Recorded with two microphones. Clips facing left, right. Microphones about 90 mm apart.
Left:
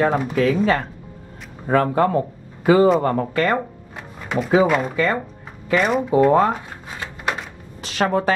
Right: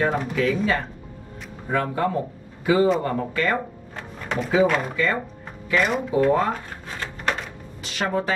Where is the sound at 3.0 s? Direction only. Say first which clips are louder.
Left 4 dB; 45° left (ahead or behind).